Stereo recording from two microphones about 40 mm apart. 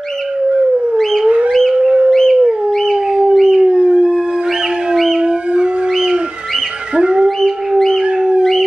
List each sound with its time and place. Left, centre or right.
1.5 s howl: centre
3.1 s howl: right
3.3 s howl: centre
3.6 s howl: centre
4.9 s howl: centre
5.2 s howl: right
7.0 s howl: right